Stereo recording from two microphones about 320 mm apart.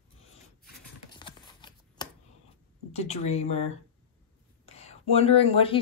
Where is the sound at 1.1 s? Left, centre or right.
Centre.